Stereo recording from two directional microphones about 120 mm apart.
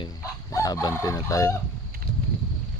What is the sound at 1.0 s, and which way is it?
Speech, 30° left (ahead or behind).